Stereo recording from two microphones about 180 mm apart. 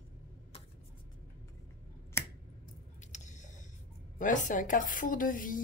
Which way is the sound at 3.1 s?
45° left (ahead or behind).